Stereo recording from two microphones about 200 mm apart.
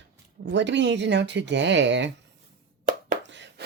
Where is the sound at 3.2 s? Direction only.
60° right (ahead or behind).